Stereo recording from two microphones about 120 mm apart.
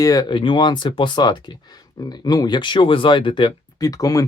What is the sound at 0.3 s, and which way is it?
Speech, 45° left (ahead or behind).